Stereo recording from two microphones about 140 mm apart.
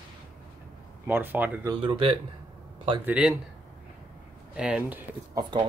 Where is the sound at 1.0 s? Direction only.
15° right (ahead or behind).